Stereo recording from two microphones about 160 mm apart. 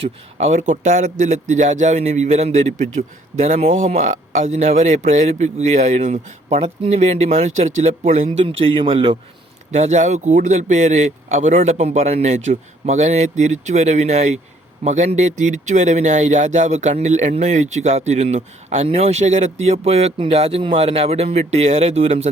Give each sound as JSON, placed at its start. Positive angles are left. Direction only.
{"t": 0.0, "sound": "speech", "side_deg": -45}
{"t": 9.7, "sound": "speech", "side_deg": -45}